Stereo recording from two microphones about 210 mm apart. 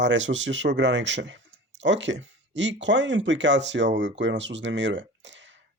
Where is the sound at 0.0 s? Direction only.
60° right (ahead or behind).